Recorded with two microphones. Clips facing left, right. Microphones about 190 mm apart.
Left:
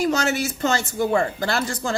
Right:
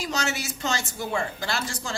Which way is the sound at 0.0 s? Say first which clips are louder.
Left 8 dB; 55° left (ahead or behind).